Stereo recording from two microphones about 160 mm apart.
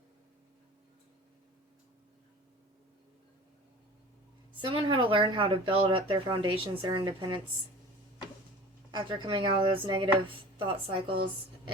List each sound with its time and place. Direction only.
4.5 s speech: 30° right (ahead or behind)
8.9 s speech: 30° right (ahead or behind)